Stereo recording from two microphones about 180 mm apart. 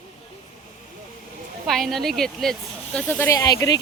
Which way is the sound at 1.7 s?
Centre (ahead or behind).